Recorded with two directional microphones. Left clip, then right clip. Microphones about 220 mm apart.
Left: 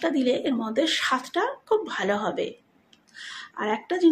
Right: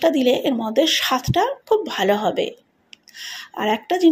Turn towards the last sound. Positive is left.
turn(degrees=-20)  # may be behind; listen again after turning